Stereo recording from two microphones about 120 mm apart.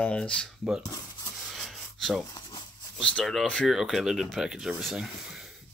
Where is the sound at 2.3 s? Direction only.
30° left (ahead or behind).